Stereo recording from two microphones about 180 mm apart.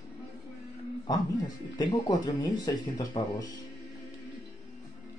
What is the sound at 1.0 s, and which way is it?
Speech, 20° left (ahead or behind).